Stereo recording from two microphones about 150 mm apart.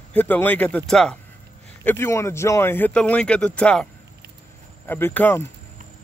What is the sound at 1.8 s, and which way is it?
Speech, 15° left (ahead or behind).